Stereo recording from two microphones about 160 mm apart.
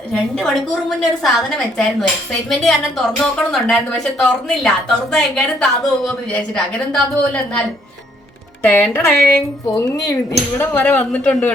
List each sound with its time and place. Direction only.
0.1 s a woman's voice: centre (ahead or behind)
8.6 s speech: 10° left (ahead or behind)